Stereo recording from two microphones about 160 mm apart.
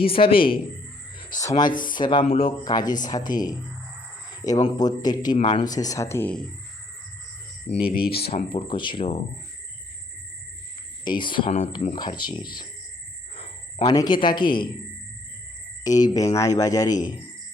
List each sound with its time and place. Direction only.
0.0 s speech: 35° left (ahead or behind); by 6.4 s 10° left (ahead or behind)
7.9 s speech: 70° left (ahead or behind)
8.4 s speech: 35° left (ahead or behind)
11.0 s speech: 30° left (ahead or behind)
13.3 s cricket: 40° left (ahead or behind)
13.8 s speech: 25° left (ahead or behind)
15.8 s speech: 25° left (ahead or behind)
16.9 s speech: 55° left (ahead or behind)